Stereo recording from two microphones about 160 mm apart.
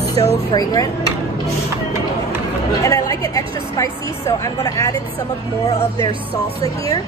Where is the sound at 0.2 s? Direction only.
25° left (ahead or behind).